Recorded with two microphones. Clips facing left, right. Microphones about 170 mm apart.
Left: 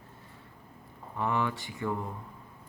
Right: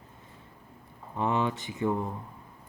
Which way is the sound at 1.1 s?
20° right (ahead or behind).